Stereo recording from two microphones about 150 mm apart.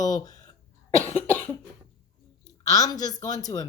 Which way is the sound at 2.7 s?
25° left (ahead or behind).